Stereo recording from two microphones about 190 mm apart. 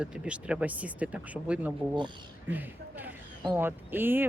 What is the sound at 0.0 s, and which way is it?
Speech, 5° right (ahead or behind).